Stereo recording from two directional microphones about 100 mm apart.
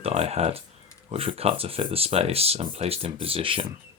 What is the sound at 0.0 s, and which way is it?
Speech, 90° right.